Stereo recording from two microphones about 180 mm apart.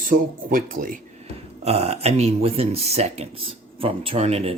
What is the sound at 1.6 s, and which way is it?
Speech, 35° right (ahead or behind).